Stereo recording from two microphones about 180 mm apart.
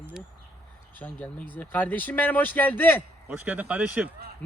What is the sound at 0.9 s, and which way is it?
Speech, 10° left (ahead or behind).